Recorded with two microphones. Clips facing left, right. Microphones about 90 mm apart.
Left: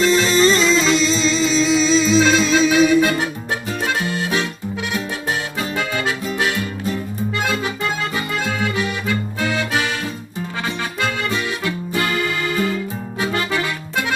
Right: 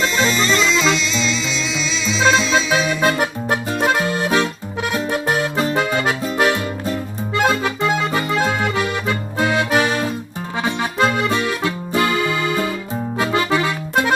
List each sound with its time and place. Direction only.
0.0 s music: 40° right (ahead or behind)
0.4 s music: 40° left (ahead or behind)
2.7 s music: 40° right (ahead or behind)
7.4 s accordion: 40° right (ahead or behind)
11.0 s music: 30° right (ahead or behind)